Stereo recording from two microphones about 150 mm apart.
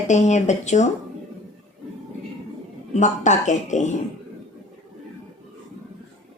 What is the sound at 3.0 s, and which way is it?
Speech, 55° left (ahead or behind).